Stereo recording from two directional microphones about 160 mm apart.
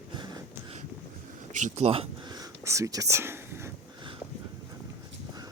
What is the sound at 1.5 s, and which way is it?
Speech, 45° right (ahead or behind).